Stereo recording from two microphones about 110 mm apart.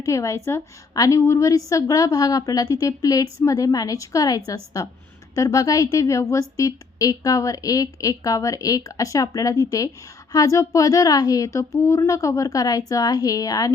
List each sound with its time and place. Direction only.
0.0 s speech: 25° left (ahead or behind)